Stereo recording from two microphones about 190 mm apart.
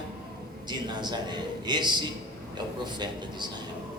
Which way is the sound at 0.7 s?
20° right (ahead or behind).